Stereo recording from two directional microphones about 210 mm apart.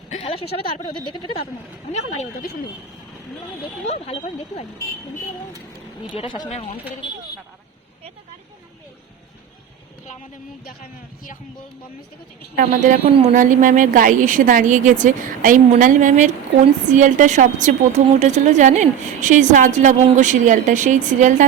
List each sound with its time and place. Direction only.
0.1 s a woman's voice: 25° left (ahead or behind)
3.6 s speech: 30° left (ahead or behind)
6.0 s speech: 25° left (ahead or behind)
12.5 s a woman's voice: 40° right (ahead or behind)